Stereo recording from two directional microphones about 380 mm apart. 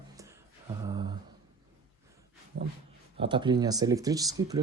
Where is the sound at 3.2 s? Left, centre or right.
Centre.